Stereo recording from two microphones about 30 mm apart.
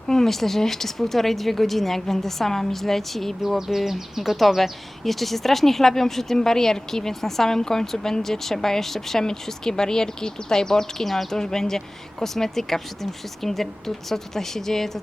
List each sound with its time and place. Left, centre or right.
0.1 s speech: centre
3.7 s speech: centre
4.2 s speech: centre